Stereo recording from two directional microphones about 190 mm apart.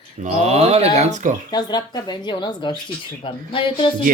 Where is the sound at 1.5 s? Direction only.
20° left (ahead or behind).